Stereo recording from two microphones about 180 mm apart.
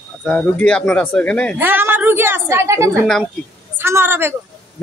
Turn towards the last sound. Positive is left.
turn(degrees=-15)  # may be behind; listen again after turning